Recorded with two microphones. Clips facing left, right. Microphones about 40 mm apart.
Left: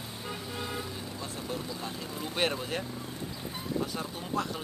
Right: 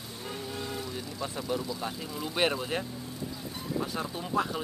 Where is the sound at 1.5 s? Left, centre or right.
Right.